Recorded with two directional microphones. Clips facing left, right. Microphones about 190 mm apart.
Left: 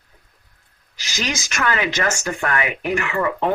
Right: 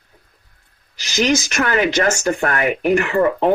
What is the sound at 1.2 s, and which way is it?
Speech, 50° right (ahead or behind).